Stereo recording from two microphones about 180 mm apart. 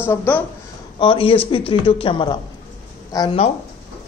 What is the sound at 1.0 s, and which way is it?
A man's voice, 30° left (ahead or behind).